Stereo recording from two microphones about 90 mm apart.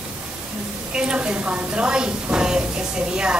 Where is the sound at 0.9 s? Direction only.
10° right (ahead or behind).